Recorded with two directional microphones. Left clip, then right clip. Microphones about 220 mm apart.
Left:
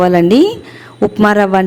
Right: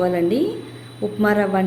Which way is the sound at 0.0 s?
45° left (ahead or behind).